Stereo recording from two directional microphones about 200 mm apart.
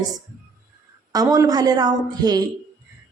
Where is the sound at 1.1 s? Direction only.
20° right (ahead or behind).